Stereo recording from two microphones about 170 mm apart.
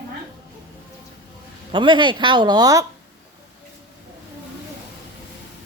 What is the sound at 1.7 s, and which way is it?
Speech, 30° right (ahead or behind).